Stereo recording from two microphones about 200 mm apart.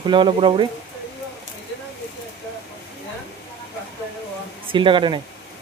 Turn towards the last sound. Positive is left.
turn(degrees=-25)  # may be behind; listen again after turning